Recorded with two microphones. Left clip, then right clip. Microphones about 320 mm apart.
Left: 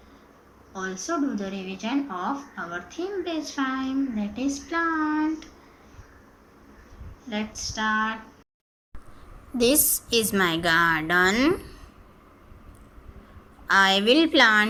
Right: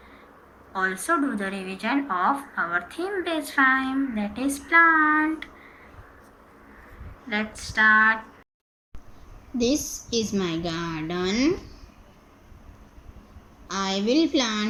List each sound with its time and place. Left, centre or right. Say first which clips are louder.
0.7 s speech: right 6 dB; centre
7.3 s a sound: right 3 dB; centre
9.5 s a woman's voice: left 3 dB; left
10.1 s a woman's voice: left 4 dB; left
13.7 s a woman's voice: left 7 dB; left